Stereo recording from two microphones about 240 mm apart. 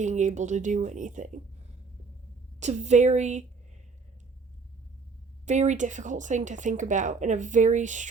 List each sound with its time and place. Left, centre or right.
0.0 s speech: right
2.6 s a woman's voice: right
5.5 s speech: right